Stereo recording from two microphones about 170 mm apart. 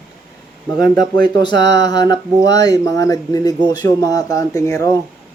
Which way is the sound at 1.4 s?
25° left (ahead or behind).